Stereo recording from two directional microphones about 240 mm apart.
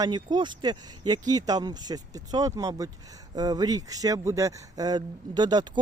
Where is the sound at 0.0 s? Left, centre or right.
Centre.